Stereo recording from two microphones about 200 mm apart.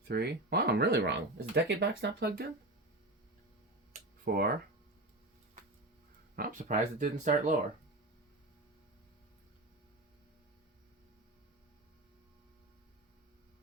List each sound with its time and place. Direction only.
0.1 s speech: 55° right (ahead or behind)
4.3 s speech: 55° right (ahead or behind)
6.3 s speech: 45° right (ahead or behind)